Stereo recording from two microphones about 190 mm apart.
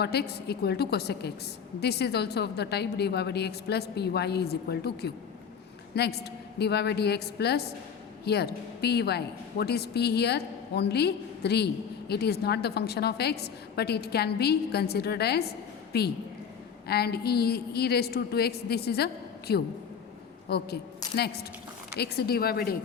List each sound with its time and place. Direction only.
0.0 s a woman's voice: 60° left (ahead or behind)
21.9 s speech: 55° left (ahead or behind)